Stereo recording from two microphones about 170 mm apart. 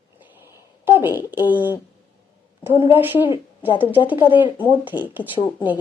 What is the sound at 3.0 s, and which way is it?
A woman's voice, 10° right (ahead or behind).